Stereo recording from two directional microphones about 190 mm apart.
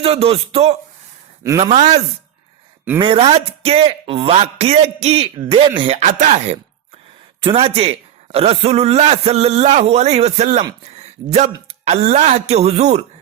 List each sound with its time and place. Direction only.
0.0 s a man's voice: 30° right (ahead or behind)
3.0 s speech: 30° right (ahead or behind)
7.4 s speech: 30° right (ahead or behind)